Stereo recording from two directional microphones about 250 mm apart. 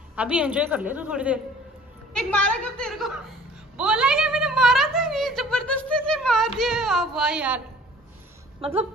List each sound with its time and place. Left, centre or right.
0.1 s a woman's voice: centre
3.7 s a sound: centre
8.5 s speech: right